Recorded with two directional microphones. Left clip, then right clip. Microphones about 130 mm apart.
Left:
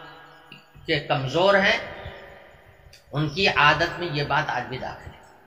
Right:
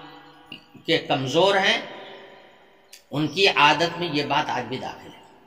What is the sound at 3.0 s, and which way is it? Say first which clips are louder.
A man's voice: right 3 dB; 60° right (ahead or behind).